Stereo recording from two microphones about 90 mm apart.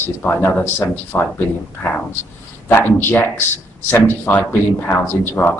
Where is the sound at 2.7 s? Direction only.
25° left (ahead or behind).